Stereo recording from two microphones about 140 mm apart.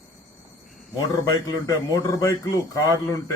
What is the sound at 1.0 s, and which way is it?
Speech, 30° left (ahead or behind).